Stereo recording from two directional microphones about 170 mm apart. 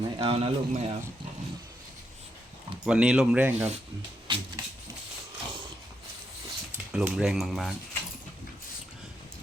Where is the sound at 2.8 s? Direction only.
5° right (ahead or behind).